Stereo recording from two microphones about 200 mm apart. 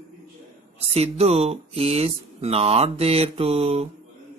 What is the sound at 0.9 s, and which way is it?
Speech, 30° right (ahead or behind).